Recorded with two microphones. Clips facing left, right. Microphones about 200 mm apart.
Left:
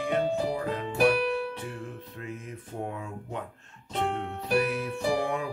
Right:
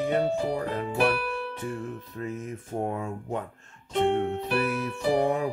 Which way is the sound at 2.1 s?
40° right (ahead or behind).